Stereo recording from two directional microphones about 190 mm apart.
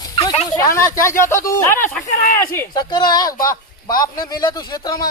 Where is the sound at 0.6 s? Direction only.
15° left (ahead or behind).